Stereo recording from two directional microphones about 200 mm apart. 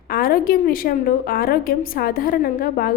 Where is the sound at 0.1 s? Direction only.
45° left (ahead or behind).